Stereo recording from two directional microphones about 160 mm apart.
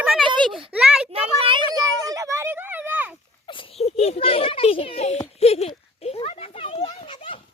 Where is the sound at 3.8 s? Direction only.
40° left (ahead or behind).